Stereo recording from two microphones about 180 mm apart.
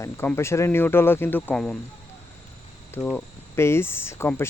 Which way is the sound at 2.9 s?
5° left (ahead or behind).